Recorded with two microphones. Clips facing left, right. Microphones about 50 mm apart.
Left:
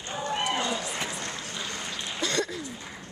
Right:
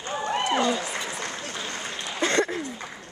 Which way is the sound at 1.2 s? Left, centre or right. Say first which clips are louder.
Right 2 dB; right.